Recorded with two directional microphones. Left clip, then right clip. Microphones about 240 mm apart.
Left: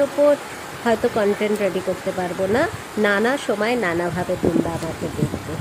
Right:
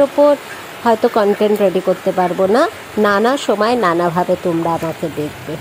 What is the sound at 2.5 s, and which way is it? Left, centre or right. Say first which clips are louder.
Speech: right 6 dB; right.